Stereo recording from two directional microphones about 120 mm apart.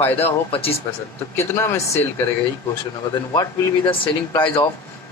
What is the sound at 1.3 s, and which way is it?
Speech, 20° left (ahead or behind).